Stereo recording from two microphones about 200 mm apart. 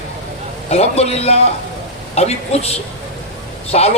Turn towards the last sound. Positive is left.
turn(degrees=30)  # may be behind; listen again after turning